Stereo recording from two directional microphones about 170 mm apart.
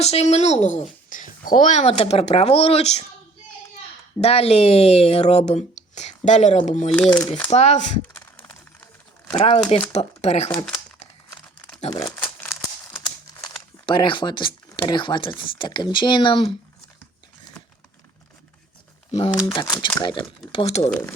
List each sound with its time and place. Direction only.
0.0 s speech: 40° left (ahead or behind)
4.2 s speech: 35° left (ahead or behind)
8.0 s a sound: 10° left (ahead or behind)
9.4 s speech: 35° left (ahead or behind)
10.5 s speech: 25° left (ahead or behind)
11.9 s crumpling: 20° left (ahead or behind)
13.0 s crumpling: 25° left (ahead or behind)
13.8 s speech: 30° left (ahead or behind)
19.5 s speech: 20° left (ahead or behind); by 20.9 s 35° left (ahead or behind)